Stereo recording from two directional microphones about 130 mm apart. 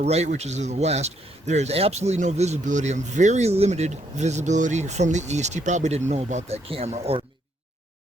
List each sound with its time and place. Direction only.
0.0 s speech: 55° right (ahead or behind)